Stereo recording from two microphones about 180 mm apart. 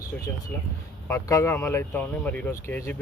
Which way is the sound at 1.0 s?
15° left (ahead or behind).